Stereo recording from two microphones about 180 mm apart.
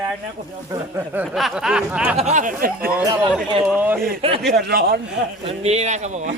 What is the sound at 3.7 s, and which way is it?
Speech, 10° right (ahead or behind).